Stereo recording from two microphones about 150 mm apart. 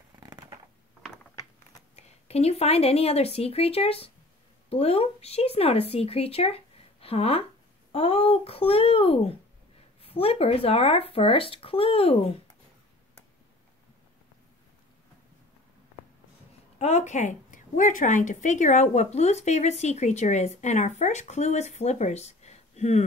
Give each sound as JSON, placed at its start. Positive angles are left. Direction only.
{"t": 0.1, "sound": "a sound", "side_deg": -25}
{"t": 2.0, "sound": "speech", "side_deg": 45}
{"t": 16.7, "sound": "speech", "side_deg": 50}